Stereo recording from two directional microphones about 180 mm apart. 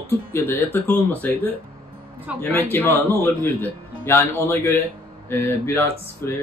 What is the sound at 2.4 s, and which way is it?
A man's voice, 10° left (ahead or behind).